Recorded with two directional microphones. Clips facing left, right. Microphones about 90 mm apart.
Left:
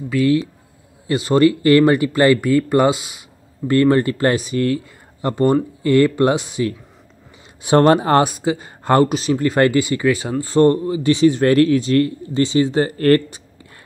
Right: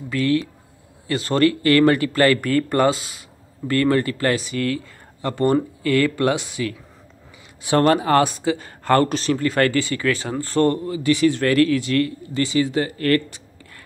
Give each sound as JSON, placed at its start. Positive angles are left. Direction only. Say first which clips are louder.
{"t": 0.1, "sound": "a man's voice", "louder": "left 4 dB", "side_deg": 15}
{"t": 8.2, "sound": "a man's voice", "louder": "left 2 dB", "side_deg": 15}
{"t": 9.1, "sound": "speech", "louder": "left 2 dB", "side_deg": 10}
{"t": 9.4, "sound": "a man's voice", "louder": "left 5 dB", "side_deg": 20}